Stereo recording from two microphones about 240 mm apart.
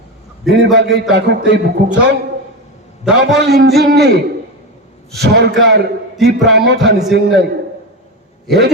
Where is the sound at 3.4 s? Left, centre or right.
Right.